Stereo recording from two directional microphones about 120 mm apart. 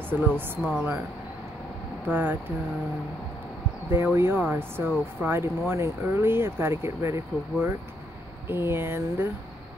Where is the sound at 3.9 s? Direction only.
20° right (ahead or behind).